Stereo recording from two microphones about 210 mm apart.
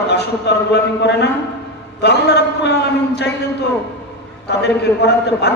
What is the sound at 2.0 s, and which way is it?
A man's voice, 55° left (ahead or behind).